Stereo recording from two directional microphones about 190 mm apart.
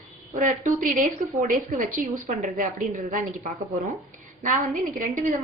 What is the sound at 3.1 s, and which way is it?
A woman's voice, 40° right (ahead or behind).